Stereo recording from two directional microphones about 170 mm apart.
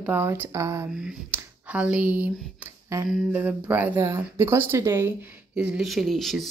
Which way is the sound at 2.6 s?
15° right (ahead or behind).